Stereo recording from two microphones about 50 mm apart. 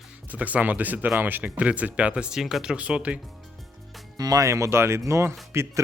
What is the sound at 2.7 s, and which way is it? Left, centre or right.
Speech, right.